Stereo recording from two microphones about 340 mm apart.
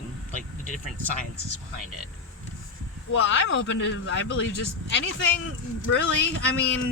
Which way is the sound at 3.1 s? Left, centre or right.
Left.